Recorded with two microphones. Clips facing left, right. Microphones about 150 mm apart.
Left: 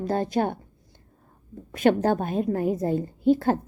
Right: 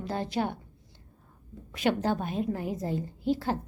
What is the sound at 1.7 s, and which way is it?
A woman's voice, 50° left (ahead or behind).